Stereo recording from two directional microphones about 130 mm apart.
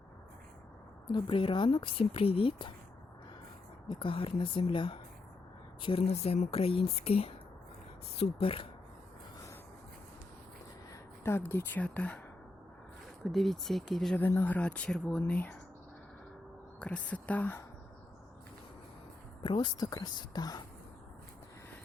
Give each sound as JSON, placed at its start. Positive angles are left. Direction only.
{"t": 1.0, "sound": "speech", "side_deg": 40}
{"t": 3.8, "sound": "speech", "side_deg": 40}
{"t": 11.2, "sound": "speech", "side_deg": 20}
{"t": 13.2, "sound": "speech", "side_deg": 0}
{"t": 14.2, "sound": "speech", "side_deg": 15}
{"t": 16.8, "sound": "speech", "side_deg": 10}
{"t": 19.4, "sound": "speech", "side_deg": 35}